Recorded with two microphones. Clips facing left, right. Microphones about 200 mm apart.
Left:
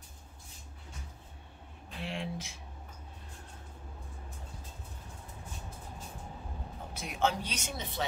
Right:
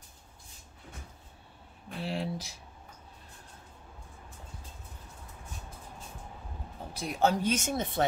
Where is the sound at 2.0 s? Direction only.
35° right (ahead or behind).